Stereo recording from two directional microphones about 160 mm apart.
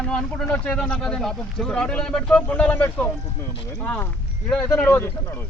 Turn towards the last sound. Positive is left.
turn(degrees=10)  # may be behind; listen again after turning